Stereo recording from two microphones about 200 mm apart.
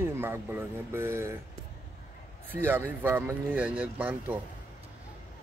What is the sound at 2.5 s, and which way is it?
Speech, 10° right (ahead or behind).